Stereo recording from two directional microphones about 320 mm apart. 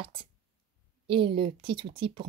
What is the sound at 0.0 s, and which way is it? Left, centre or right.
Speech, centre.